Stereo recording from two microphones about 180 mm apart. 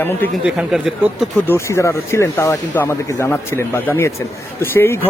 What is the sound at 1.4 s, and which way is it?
Speech, 15° left (ahead or behind).